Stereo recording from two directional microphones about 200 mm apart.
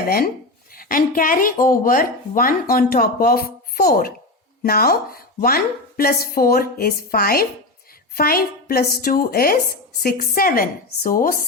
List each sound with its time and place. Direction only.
0.0 s speech: 50° left (ahead or behind)